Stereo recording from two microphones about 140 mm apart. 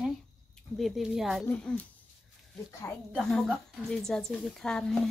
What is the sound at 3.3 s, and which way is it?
Speech, 5° left (ahead or behind).